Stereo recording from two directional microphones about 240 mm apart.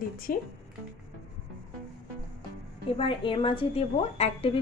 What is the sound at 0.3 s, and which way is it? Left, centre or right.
Speech, left.